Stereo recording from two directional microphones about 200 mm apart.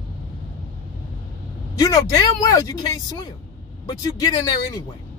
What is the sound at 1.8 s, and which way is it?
Speech, 20° left (ahead or behind).